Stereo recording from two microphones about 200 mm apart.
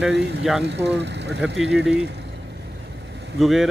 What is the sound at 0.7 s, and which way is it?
Speech, 60° right (ahead or behind).